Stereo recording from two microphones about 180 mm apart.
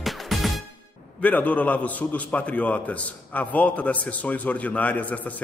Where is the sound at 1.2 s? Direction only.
10° left (ahead or behind).